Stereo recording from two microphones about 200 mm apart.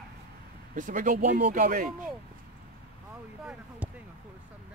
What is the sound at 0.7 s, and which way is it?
Speech, 40° right (ahead or behind).